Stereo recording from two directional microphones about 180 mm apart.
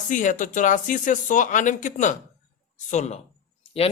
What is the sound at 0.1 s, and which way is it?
Speech, 45° left (ahead or behind).